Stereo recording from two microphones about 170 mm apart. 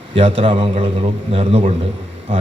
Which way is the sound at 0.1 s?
30° right (ahead or behind).